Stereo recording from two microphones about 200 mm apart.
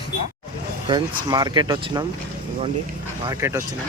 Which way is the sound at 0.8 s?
20° right (ahead or behind).